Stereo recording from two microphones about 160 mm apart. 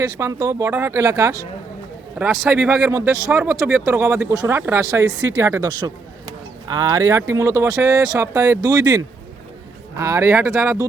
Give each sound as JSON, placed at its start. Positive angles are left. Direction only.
{"t": 0.2, "sound": "speech", "side_deg": -20}
{"t": 10.0, "sound": "speech", "side_deg": -20}